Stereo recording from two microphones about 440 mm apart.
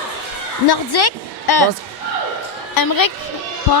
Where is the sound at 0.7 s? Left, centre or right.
Left.